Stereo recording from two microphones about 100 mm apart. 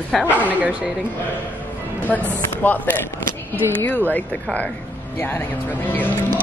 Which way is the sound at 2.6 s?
20° left (ahead or behind).